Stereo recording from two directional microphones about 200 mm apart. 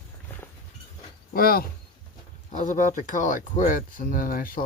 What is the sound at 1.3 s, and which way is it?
Speech, 50° left (ahead or behind).